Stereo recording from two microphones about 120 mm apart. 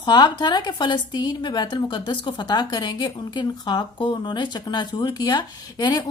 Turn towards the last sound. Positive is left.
turn(degrees=35)  # may be behind; listen again after turning